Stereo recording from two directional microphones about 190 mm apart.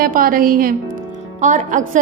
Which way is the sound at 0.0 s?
50° right (ahead or behind).